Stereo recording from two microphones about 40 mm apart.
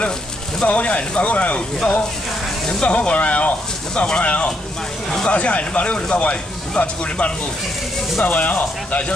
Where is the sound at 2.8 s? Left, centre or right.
Left.